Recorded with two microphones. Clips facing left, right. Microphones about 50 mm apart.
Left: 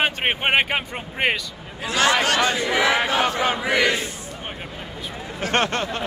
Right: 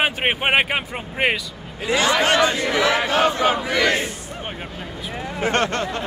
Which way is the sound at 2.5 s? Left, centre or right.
Left.